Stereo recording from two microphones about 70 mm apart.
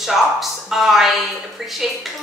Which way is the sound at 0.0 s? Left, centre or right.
Centre.